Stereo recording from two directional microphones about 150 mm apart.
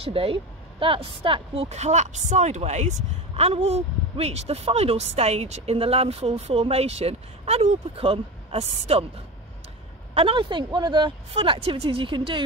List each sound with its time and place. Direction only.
0.0 s speech: 40° right (ahead or behind)
10.1 s speech: 35° right (ahead or behind)